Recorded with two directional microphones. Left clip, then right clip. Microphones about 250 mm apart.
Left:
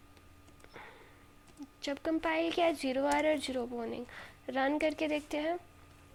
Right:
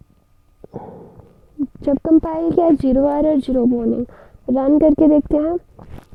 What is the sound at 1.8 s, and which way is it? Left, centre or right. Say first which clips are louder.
Speech: right 18 dB; right.